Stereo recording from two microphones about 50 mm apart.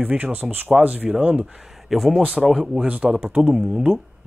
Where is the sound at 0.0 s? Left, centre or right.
Right.